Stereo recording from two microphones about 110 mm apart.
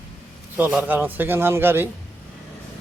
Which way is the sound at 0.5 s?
15° right (ahead or behind).